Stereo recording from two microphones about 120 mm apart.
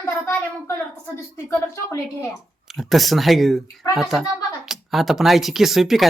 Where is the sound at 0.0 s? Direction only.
20° left (ahead or behind).